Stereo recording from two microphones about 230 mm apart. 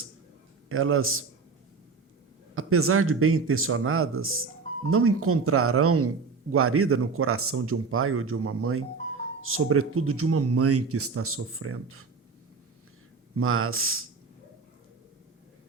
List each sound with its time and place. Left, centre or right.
0.7 s speech: right
2.6 s speech: right
13.3 s speech: right